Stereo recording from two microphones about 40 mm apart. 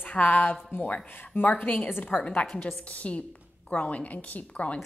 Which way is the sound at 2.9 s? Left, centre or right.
Left.